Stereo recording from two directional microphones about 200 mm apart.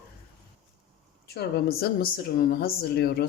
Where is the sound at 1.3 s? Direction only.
50° left (ahead or behind).